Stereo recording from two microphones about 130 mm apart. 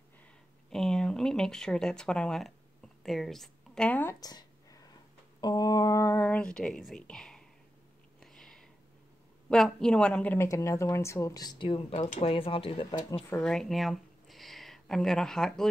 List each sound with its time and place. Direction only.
0.7 s a woman's voice: 5° left (ahead or behind)
4.2 s a sound: 30° left (ahead or behind); by 8.6 s 5° left (ahead or behind)
9.5 s a woman's voice: 5° left (ahead or behind)
10.3 s speech: 20° left (ahead or behind); by 12.8 s 45° left (ahead or behind)
13.4 s speech: 5° left (ahead or behind)